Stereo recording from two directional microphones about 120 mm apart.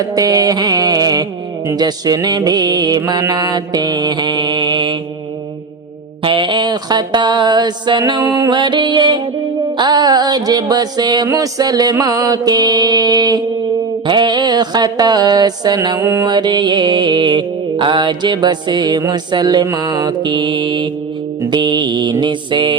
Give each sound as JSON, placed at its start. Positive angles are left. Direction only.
{"t": 0.0, "sound": "mantra", "side_deg": -30}
{"t": 1.7, "sound": "music", "side_deg": -35}
{"t": 6.2, "sound": "music", "side_deg": -45}
{"t": 8.2, "sound": "music", "side_deg": -20}
{"t": 8.4, "sound": "music", "side_deg": -40}
{"t": 16.0, "sound": "music", "side_deg": -20}
{"t": 16.2, "sound": "music", "side_deg": -35}